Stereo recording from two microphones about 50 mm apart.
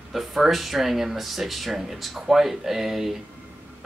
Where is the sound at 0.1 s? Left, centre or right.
Centre.